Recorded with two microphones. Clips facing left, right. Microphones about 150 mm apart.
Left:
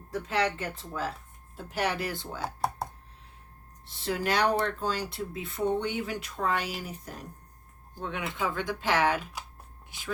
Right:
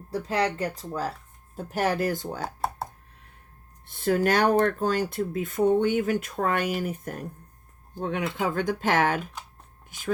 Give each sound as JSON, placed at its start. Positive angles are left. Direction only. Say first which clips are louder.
{"t": 0.1, "sound": "speech", "louder": "right 3 dB", "side_deg": -35}
{"t": 3.8, "sound": "speech", "louder": "right 7 dB", "side_deg": -50}